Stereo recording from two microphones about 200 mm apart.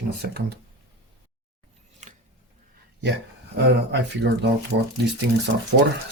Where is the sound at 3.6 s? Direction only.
60° right (ahead or behind).